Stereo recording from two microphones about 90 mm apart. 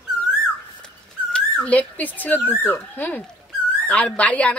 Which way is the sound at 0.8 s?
15° left (ahead or behind).